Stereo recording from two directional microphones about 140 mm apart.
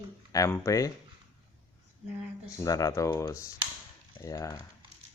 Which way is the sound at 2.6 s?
25° left (ahead or behind).